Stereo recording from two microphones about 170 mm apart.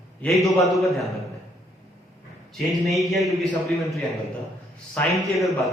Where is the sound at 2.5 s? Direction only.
Centre (ahead or behind).